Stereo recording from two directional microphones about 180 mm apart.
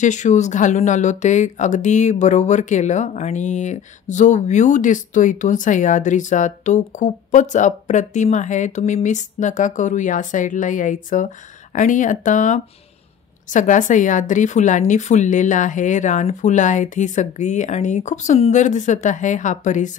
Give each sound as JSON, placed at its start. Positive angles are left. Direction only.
{"t": 0.0, "sound": "speech", "side_deg": 40}